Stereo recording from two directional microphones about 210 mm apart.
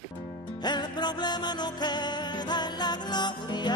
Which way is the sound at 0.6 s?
20° left (ahead or behind).